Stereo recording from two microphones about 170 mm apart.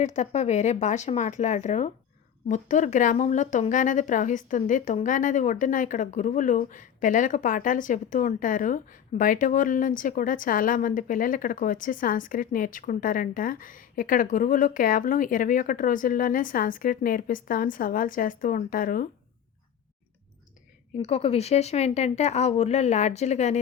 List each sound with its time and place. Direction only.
0.0 s speech: 45° left (ahead or behind)
21.0 s speech: 35° left (ahead or behind)